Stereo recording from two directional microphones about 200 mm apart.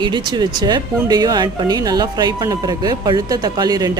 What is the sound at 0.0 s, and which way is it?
A man's voice, 20° right (ahead or behind).